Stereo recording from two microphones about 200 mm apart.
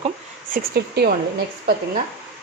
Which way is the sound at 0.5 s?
50° right (ahead or behind).